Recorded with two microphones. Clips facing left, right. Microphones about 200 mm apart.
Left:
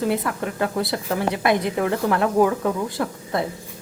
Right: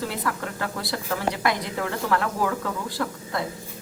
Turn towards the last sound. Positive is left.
turn(degrees=20)  # may be behind; listen again after turning